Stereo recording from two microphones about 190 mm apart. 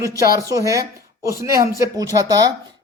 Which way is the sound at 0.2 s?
15° right (ahead or behind).